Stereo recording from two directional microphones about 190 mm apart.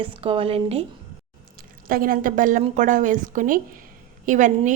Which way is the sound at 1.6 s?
50° right (ahead or behind).